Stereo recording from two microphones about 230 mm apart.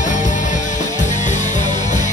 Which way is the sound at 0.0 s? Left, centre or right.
Left.